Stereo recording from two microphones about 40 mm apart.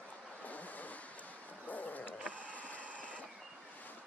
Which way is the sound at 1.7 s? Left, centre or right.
Left.